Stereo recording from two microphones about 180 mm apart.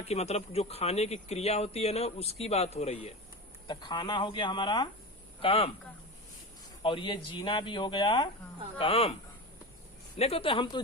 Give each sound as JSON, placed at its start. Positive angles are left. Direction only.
{"t": 0.1, "sound": "speech", "side_deg": 35}
{"t": 6.8, "sound": "speech", "side_deg": 25}
{"t": 10.2, "sound": "speech", "side_deg": 35}